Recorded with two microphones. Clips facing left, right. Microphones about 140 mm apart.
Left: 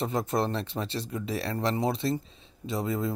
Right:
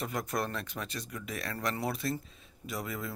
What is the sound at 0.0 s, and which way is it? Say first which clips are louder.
Speech: left 6 dB; 25° left (ahead or behind).